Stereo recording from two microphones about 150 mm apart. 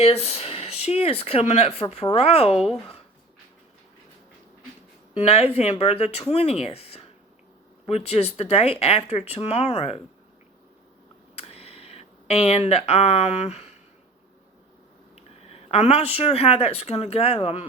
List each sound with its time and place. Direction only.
0.0 s speech: 40° left (ahead or behind)
2.6 s speech: centre (ahead or behind)
5.2 s speech: 45° left (ahead or behind)
11.3 s a sound: 40° left (ahead or behind)
15.1 s a sound: 40° left (ahead or behind)
16.1 s speech: 40° left (ahead or behind)